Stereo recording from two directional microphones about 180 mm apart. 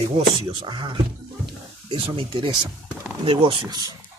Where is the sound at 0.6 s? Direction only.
25° right (ahead or behind).